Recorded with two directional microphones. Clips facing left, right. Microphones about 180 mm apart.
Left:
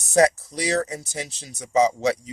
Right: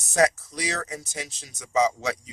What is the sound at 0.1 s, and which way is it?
Speech, 35° left (ahead or behind).